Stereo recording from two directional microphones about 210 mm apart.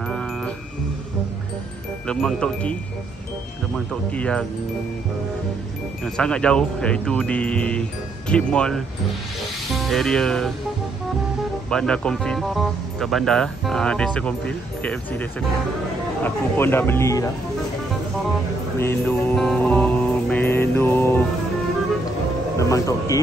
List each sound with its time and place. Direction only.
2.0 s speech: 5° left (ahead or behind)
6.0 s speech: 5° left (ahead or behind)
11.7 s speech: 5° left (ahead or behind)
16.3 s music: 10° left (ahead or behind)
18.8 s music: 10° left (ahead or behind)
22.6 s music: 15° left (ahead or behind)